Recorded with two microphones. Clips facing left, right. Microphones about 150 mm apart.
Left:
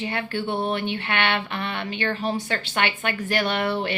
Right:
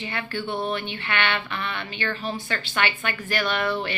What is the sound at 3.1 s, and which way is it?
Speech, 35° left (ahead or behind).